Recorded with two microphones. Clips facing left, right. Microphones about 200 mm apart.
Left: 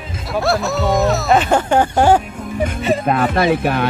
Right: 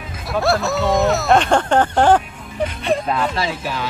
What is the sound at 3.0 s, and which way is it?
Speech, 55° left (ahead or behind).